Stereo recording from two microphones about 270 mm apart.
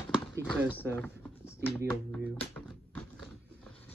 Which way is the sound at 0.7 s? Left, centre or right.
Centre.